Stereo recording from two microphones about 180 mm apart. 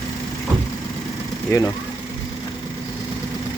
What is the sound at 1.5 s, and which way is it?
Speech, 15° left (ahead or behind).